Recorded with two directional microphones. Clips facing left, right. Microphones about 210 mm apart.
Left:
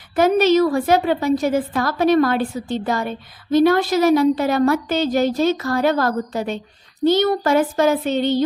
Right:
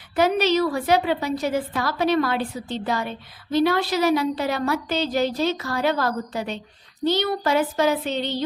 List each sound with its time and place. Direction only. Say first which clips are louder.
0.2 s a woman's voice: left 5 dB; 50° left (ahead or behind)